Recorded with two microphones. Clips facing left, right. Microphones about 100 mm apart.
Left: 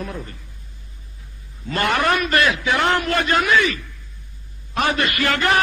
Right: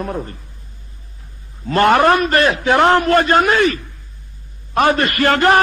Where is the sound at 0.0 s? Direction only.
40° right (ahead or behind).